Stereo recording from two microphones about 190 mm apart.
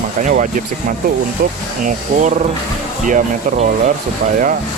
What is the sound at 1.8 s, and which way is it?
Speech, 40° right (ahead or behind).